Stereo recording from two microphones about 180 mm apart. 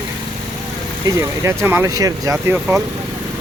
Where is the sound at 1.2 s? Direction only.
15° right (ahead or behind).